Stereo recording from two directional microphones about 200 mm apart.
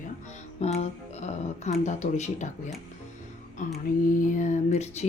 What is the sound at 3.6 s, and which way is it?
Speech, 40° left (ahead or behind).